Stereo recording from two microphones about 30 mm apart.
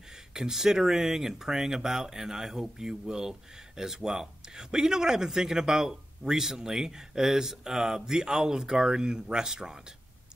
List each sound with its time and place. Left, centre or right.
0.3 s speech: centre